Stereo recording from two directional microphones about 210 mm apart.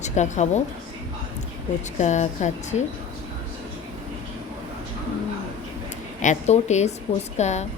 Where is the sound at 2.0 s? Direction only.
35° left (ahead or behind).